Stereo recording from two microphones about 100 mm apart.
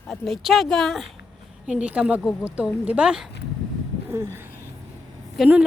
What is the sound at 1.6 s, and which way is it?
Speech, 10° right (ahead or behind).